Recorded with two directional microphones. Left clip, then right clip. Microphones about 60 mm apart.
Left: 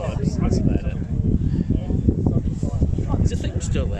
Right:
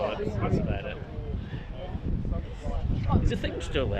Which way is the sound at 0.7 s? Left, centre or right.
Left.